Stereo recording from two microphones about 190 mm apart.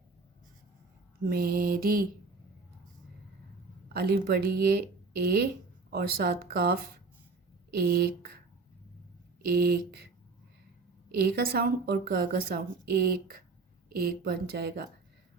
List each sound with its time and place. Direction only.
1.3 s speech: 50° right (ahead or behind)
3.8 s speech: 55° right (ahead or behind)
9.5 s speech: 55° right (ahead or behind)
11.3 s speech: 50° right (ahead or behind)